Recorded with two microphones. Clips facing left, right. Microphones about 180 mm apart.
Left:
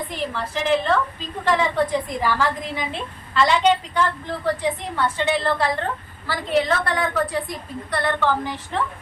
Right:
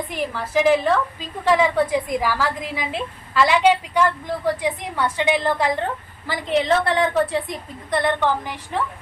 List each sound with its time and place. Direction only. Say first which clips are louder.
0.1 s a woman's voice: right 3 dB; 10° right (ahead or behind)